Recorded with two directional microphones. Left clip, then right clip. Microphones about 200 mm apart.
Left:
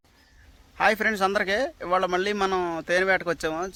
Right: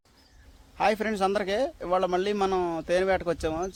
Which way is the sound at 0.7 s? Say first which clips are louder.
Left 3 dB; centre (ahead or behind).